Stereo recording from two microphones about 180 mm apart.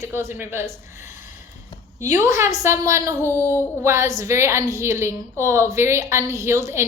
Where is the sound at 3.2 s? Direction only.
10° left (ahead or behind).